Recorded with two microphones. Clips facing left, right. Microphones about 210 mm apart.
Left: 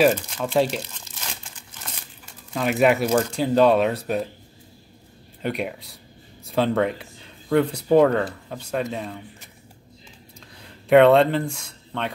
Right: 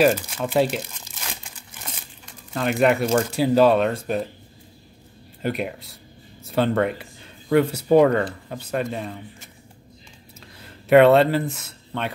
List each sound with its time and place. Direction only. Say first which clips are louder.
0.0 s speech: even; 5° right (ahead or behind)
2.5 s speech: even; centre (ahead or behind)
5.4 s speech: right 1 dB; centre (ahead or behind)
10.6 s speech: even; 5° right (ahead or behind)